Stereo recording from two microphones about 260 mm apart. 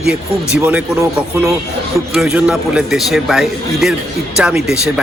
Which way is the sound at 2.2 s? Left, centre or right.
Centre.